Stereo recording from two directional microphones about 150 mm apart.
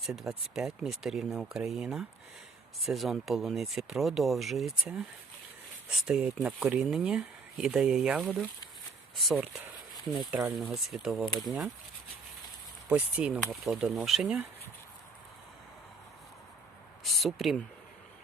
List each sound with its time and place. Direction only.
0.0 s speech: 5° right (ahead or behind)
10.6 s speech: centre (ahead or behind)
12.9 s speech: 5° right (ahead or behind)
17.0 s a sound: centre (ahead or behind)